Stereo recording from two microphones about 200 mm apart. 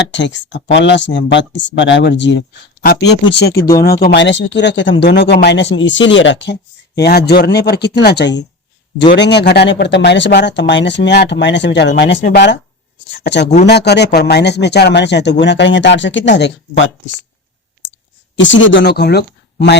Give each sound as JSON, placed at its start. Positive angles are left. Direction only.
{"t": 0.1, "sound": "speech", "side_deg": 65}
{"t": 18.3, "sound": "speech", "side_deg": 70}